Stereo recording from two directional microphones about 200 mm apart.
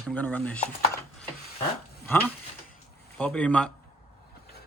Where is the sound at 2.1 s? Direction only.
10° left (ahead or behind).